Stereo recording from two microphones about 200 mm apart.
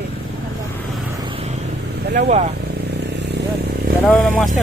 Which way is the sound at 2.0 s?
60° right (ahead or behind).